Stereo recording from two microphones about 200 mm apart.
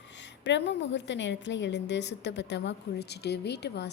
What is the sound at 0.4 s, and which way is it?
A woman's voice, 60° left (ahead or behind).